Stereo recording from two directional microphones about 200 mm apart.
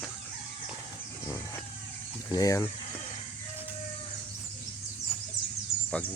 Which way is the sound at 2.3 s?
20° left (ahead or behind).